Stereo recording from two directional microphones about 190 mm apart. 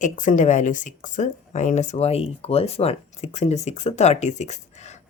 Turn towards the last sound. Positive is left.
turn(degrees=40)  # may be behind; listen again after turning